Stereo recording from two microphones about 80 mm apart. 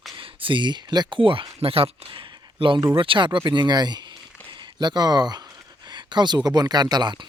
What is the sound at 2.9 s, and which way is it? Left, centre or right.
Speech, right.